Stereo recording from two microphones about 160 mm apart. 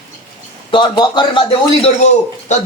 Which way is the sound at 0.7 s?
30° left (ahead or behind).